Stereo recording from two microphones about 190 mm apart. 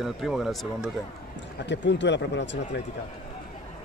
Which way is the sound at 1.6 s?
70° left (ahead or behind).